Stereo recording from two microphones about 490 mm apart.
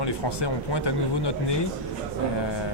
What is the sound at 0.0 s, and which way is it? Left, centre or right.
Speech, left.